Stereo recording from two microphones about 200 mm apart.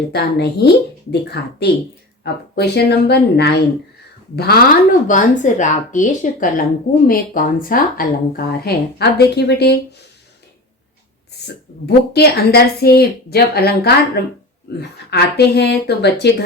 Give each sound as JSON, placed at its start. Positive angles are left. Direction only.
{"t": 0.1, "sound": "a woman's voice", "side_deg": 55}
{"t": 12.1, "sound": "a woman's voice", "side_deg": 55}